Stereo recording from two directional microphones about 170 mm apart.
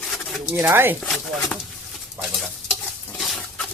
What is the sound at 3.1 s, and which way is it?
Water, centre (ahead or behind).